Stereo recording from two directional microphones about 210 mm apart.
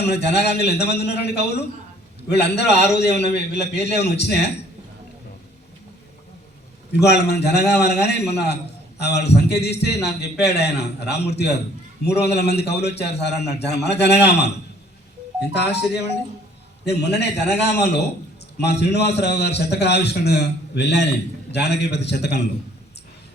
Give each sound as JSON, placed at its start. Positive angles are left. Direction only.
{"t": 0.0, "sound": "a man's voice", "side_deg": 50}
{"t": 7.0, "sound": "a man's voice", "side_deg": 50}